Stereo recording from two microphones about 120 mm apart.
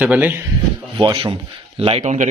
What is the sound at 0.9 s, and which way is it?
Speech, 45° right (ahead or behind).